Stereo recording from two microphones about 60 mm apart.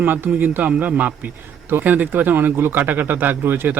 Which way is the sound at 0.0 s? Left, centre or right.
Right.